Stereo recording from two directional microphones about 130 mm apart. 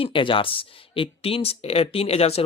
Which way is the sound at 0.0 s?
40° left (ahead or behind).